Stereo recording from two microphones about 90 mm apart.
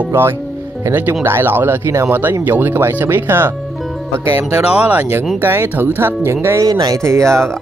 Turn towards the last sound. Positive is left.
turn(degrees=-30)  # may be behind; listen again after turning